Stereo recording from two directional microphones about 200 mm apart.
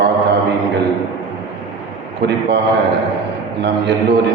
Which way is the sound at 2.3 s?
55° right (ahead or behind).